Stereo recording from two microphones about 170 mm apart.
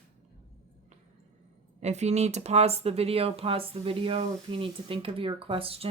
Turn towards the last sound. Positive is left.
turn(degrees=-35)  # may be behind; listen again after turning